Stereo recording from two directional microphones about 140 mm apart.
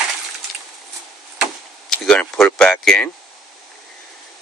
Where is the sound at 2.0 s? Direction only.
5° left (ahead or behind).